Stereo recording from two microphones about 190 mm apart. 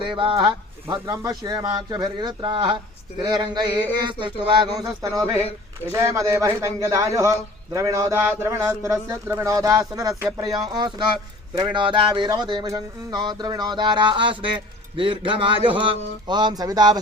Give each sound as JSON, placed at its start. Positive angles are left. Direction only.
{"t": 0.0, "sound": "a man's voice", "side_deg": -25}